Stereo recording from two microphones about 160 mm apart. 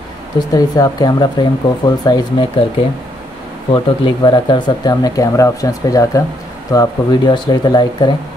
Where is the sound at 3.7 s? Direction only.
30° left (ahead or behind).